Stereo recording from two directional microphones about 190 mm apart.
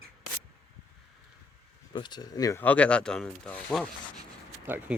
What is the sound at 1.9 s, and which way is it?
Speech, 25° left (ahead or behind).